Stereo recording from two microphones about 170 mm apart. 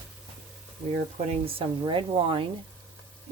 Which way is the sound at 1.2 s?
35° right (ahead or behind).